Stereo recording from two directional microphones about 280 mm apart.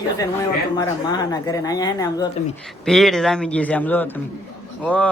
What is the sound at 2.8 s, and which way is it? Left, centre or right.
Speech, centre.